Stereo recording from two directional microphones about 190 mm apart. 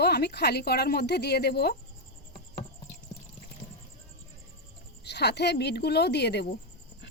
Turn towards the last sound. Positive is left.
turn(degrees=60)  # may be behind; listen again after turning